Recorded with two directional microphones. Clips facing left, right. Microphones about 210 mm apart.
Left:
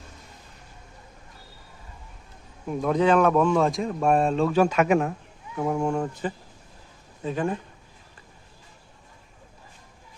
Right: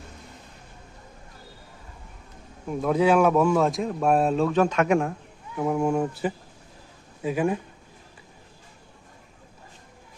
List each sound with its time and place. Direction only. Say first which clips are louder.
2.6 s speech: even; 5° right (ahead or behind)